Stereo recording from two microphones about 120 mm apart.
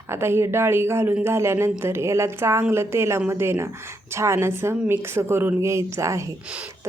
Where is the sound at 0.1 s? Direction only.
20° right (ahead or behind).